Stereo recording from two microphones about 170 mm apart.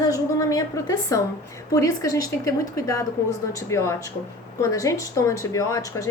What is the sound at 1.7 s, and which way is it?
A woman's voice, 20° left (ahead or behind).